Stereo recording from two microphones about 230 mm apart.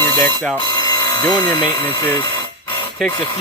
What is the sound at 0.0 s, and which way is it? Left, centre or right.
Speech, centre.